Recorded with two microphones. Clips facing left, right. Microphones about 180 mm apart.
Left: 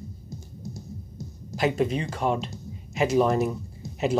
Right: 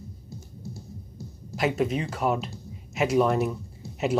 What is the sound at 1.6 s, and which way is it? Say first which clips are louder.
Speech: left 1 dB; centre (ahead or behind).